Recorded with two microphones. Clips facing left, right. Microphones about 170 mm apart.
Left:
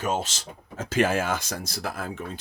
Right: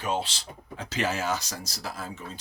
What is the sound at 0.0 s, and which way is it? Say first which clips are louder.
Speech: left 2 dB; 45° left (ahead or behind).